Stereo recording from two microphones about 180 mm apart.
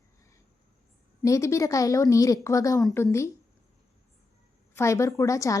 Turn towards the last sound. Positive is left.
turn(degrees=15)  # may be behind; listen again after turning